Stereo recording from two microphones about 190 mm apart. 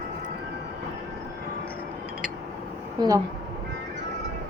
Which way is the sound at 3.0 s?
20° right (ahead or behind).